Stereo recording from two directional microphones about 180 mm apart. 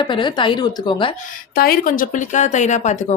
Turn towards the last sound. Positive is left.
turn(degrees=40)  # may be behind; listen again after turning